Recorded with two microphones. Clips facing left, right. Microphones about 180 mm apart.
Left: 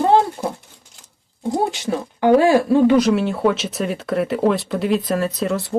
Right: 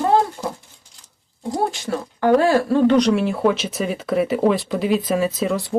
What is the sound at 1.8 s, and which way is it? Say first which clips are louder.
Speech: left 3 dB; 15° left (ahead or behind).